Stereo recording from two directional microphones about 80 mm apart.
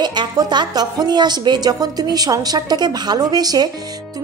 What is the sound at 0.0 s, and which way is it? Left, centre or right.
A woman's voice, right.